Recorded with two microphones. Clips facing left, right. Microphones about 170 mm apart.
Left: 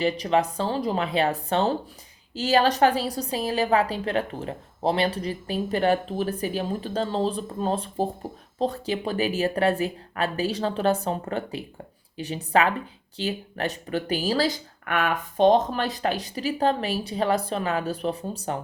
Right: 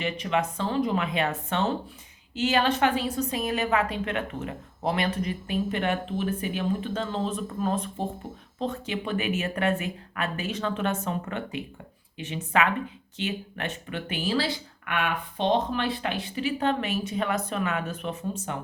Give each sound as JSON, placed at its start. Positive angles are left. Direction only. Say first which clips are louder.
{"t": 0.0, "sound": "a woman's voice", "louder": "left 5 dB", "side_deg": 35}